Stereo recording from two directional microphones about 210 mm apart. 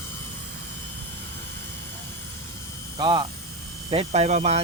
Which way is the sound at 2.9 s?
20° right (ahead or behind).